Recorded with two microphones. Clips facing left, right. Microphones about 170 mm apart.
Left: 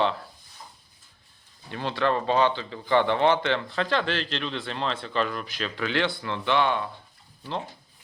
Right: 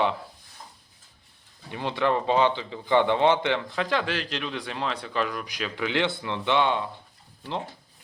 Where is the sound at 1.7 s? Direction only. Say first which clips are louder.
Even; 15° right (ahead or behind).